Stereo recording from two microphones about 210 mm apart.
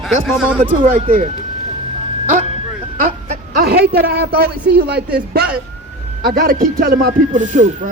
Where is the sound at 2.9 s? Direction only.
40° right (ahead or behind).